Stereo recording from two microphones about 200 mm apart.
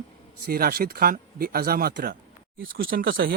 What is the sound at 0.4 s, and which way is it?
Speech, 50° right (ahead or behind).